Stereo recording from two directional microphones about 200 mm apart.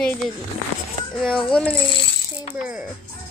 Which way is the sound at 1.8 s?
65° left (ahead or behind).